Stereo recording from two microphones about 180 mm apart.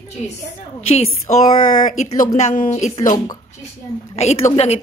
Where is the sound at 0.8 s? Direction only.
35° left (ahead or behind).